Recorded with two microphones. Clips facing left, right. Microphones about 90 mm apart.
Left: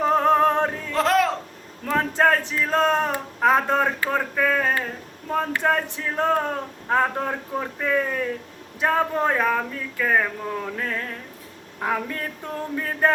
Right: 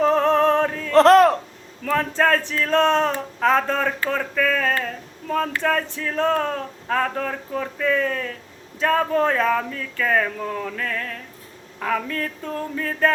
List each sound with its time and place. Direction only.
0.1 s music: 15° left (ahead or behind)
0.9 s a sound: 60° right (ahead or behind)
1.9 s male singing: 15° left (ahead or behind)
10.8 s speech: 25° left (ahead or behind)